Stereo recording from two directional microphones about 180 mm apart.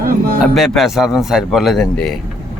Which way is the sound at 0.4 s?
Centre (ahead or behind).